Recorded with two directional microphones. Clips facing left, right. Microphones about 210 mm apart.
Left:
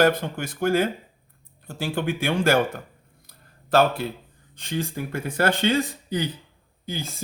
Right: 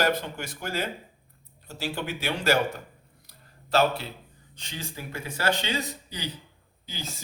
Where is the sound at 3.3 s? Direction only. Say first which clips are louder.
Left 5 dB; 50° left (ahead or behind).